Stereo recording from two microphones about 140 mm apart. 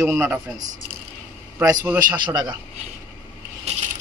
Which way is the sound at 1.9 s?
30° right (ahead or behind).